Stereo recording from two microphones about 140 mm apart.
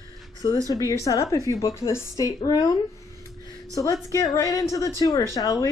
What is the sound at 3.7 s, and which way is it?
A woman's voice, 25° left (ahead or behind).